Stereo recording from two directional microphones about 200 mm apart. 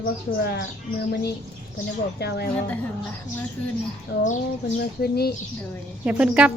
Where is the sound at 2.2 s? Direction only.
55° left (ahead or behind).